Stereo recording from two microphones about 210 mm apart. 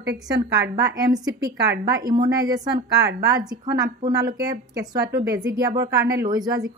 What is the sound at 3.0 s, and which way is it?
Speech, 50° right (ahead or behind).